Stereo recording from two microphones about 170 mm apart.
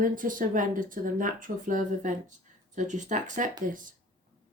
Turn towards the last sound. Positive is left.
turn(degrees=-50)  # may be behind; listen again after turning